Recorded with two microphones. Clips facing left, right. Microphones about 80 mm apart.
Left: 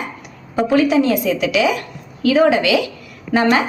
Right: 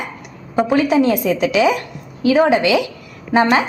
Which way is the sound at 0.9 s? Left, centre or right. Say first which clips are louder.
Right 1 dB; right.